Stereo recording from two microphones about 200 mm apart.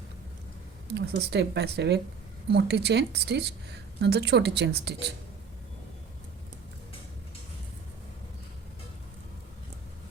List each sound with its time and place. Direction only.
0.9 s a woman's voice: 55° right (ahead or behind)